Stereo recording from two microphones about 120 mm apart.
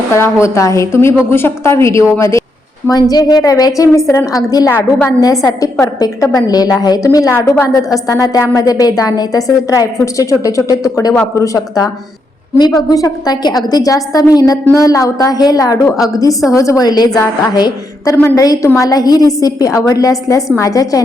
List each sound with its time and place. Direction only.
0.1 s a woman's voice: 25° left (ahead or behind)